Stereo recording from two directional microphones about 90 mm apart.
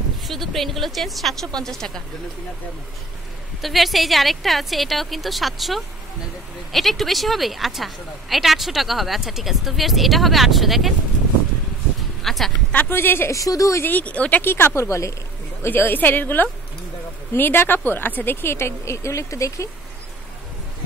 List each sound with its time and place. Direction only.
0.3 s a woman's voice: centre (ahead or behind)
3.6 s a woman's voice: centre (ahead or behind)
12.2 s a sound: centre (ahead or behind)
12.7 s speech: 25° left (ahead or behind)
13.4 s speech: 40° left (ahead or behind)
13.8 s speech: 15° left (ahead or behind)
14.4 s speech: 25° left (ahead or behind)
15.6 s speech: 20° left (ahead or behind)